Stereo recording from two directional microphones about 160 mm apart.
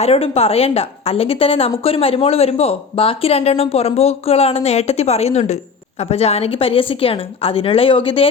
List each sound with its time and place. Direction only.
0.0 s a woman's voice: 40° left (ahead or behind)